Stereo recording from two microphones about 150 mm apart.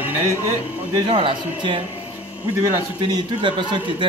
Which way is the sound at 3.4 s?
30° right (ahead or behind).